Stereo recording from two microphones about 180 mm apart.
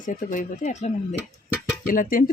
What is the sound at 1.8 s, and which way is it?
Speech, 50° left (ahead or behind).